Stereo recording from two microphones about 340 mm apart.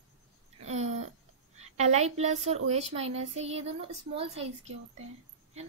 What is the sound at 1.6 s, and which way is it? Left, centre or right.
A woman's voice, centre.